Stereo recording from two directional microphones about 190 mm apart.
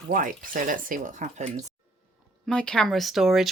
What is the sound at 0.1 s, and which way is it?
Speech, 45° right (ahead or behind).